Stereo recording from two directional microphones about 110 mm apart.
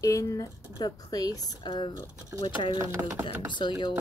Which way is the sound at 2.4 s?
50° left (ahead or behind).